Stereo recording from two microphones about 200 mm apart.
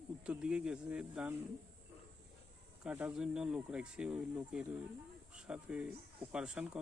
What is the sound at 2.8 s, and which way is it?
Speech, 5° right (ahead or behind).